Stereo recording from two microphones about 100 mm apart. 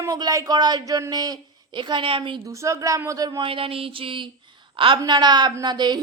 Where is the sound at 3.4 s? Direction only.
65° right (ahead or behind).